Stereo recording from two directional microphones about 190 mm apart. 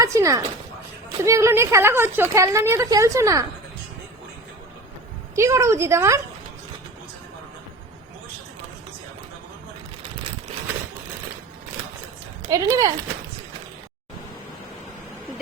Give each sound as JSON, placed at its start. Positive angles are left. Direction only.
{"t": 0.0, "sound": "a woman's voice", "side_deg": -15}
{"t": 5.3, "sound": "a woman's voice", "side_deg": -15}
{"t": 12.4, "sound": "speech", "side_deg": -15}